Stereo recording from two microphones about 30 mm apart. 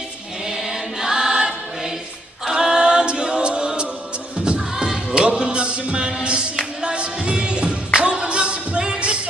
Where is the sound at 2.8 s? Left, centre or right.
Right.